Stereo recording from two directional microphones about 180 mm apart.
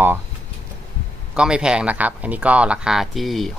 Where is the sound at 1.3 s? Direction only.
5° right (ahead or behind).